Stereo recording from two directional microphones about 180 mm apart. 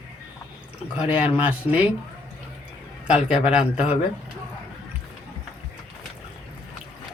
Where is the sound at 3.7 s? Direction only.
35° left (ahead or behind).